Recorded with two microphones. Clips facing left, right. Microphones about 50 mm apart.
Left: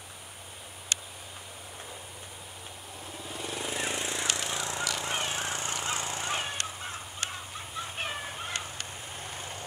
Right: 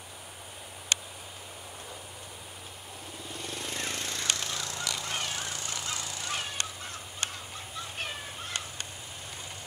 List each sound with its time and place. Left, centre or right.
3.3 s a sound: centre; by 4.8 s left
4.9 s fowl: left
6.3 s crow: left